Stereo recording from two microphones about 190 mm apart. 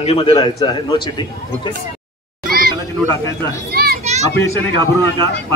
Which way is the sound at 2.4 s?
50° right (ahead or behind).